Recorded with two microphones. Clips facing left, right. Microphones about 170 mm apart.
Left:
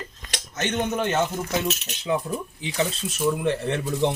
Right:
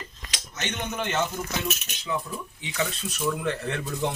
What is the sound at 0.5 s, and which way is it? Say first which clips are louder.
Speech: left 7 dB; 45° left (ahead or behind).